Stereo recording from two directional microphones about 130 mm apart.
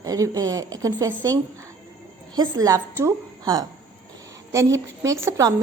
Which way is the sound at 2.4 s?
30° right (ahead or behind).